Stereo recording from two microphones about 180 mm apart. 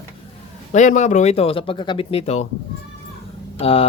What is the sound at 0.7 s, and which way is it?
Speech, 45° left (ahead or behind).